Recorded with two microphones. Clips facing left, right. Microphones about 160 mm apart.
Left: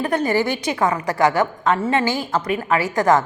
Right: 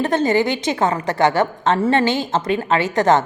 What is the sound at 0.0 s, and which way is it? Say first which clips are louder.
Speech: right 2 dB; 25° right (ahead or behind).